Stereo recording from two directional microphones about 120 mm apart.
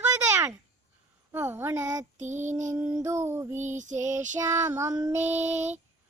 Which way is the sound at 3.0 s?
20° right (ahead or behind).